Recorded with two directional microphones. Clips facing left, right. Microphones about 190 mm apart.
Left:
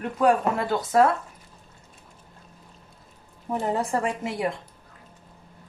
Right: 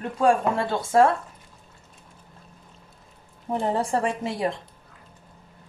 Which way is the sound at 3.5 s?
30° right (ahead or behind).